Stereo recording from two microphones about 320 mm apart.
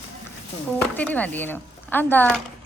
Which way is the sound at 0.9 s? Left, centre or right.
Centre.